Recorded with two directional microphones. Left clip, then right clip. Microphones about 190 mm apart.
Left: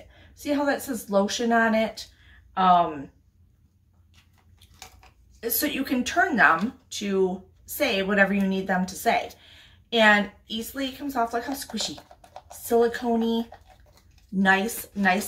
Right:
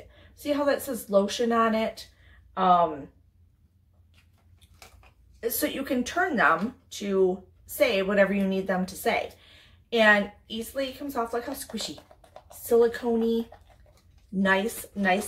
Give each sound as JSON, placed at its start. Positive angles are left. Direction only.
{"t": 0.3, "sound": "a woman's voice", "side_deg": -5}
{"t": 5.4, "sound": "a woman's voice", "side_deg": 0}